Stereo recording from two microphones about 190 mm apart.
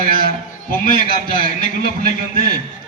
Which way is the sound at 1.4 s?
50° right (ahead or behind).